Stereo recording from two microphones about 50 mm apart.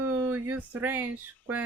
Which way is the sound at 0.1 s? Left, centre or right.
Right.